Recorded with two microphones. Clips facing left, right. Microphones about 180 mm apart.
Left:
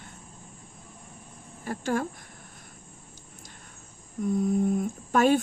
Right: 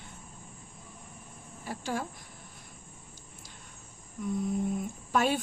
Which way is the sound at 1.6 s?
50° left (ahead or behind).